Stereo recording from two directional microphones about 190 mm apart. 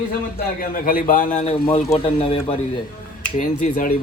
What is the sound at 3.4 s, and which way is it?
Speech, 45° left (ahead or behind).